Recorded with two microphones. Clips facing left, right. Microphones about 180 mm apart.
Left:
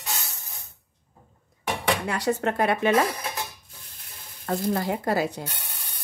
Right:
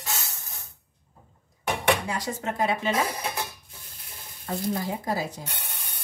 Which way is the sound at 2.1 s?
65° left (ahead or behind).